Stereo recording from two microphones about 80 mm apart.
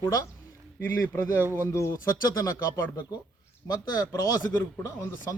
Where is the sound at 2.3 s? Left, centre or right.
Left.